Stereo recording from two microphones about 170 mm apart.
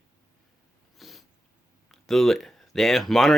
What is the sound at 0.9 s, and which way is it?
Cat, centre (ahead or behind).